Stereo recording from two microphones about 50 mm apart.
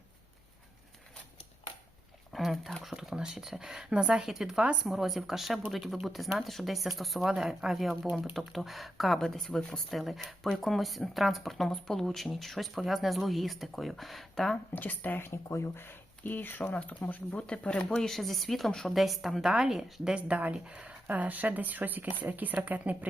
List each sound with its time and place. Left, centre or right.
2.3 s speech: centre
9.9 s speech: centre
14.7 s speech: left
15.3 s speech: left
16.7 s speech: left
18.0 s speech: centre
18.9 s speech: centre
20.2 s speech: right